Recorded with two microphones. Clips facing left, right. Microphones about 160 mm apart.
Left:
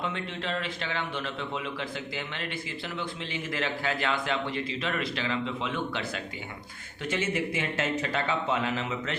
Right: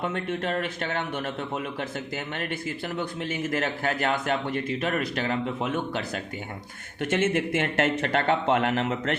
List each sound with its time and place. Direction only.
0.0 s a man's voice: 50° right (ahead or behind)
7.0 s speech: 60° right (ahead or behind)